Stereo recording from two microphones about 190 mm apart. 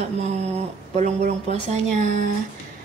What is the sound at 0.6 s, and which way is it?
Speech, 35° right (ahead or behind).